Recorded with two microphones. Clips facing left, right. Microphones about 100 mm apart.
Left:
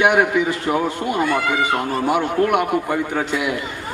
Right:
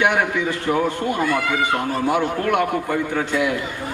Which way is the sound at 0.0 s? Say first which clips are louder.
Left 3 dB; 15° left (ahead or behind).